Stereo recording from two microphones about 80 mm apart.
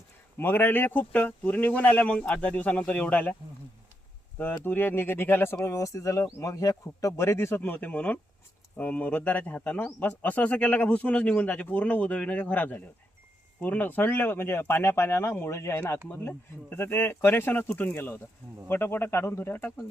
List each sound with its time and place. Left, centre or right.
0.3 s speech: left
4.6 s speech: left
7.2 s speech: left